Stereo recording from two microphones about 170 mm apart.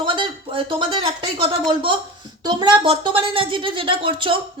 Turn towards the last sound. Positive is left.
turn(degrees=-30)  # may be behind; listen again after turning